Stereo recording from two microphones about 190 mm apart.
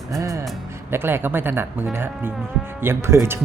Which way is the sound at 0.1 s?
15° right (ahead or behind).